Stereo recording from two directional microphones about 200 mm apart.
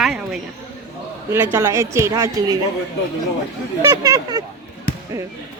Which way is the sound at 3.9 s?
20° right (ahead or behind).